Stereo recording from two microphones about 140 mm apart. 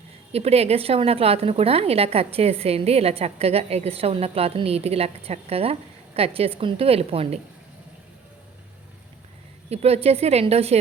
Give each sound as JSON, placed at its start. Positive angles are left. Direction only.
{"t": 0.3, "sound": "a woman's voice", "side_deg": -45}
{"t": 9.6, "sound": "a woman's voice", "side_deg": -45}